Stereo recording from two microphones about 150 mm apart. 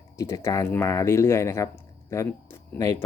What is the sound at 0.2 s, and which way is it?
Speech, 20° left (ahead or behind).